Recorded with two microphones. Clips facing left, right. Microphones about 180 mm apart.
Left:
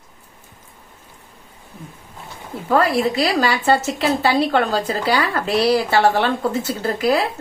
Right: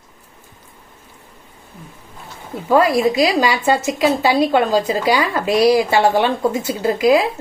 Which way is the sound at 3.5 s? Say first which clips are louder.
Right 1 dB; 10° right (ahead or behind).